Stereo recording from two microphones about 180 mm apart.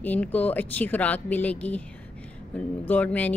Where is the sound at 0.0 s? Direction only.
10° left (ahead or behind).